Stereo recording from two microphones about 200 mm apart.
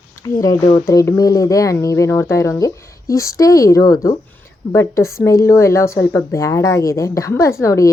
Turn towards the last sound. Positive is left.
turn(degrees=15)  # may be behind; listen again after turning